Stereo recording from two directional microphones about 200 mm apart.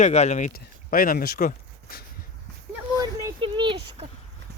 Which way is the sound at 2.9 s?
20° right (ahead or behind).